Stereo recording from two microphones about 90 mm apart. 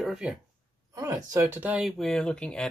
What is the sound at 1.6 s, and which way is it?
Speech, 15° right (ahead or behind).